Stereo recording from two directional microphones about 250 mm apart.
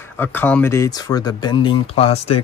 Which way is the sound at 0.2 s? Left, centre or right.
Centre.